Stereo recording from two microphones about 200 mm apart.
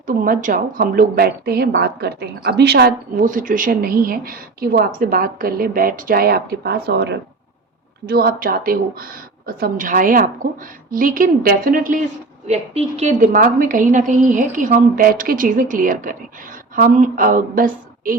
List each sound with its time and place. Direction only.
0.0 s a woman's voice: 40° right (ahead or behind)
12.5 s a woman's voice: 35° right (ahead or behind)